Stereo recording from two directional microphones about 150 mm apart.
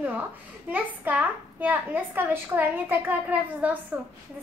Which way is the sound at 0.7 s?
10° right (ahead or behind).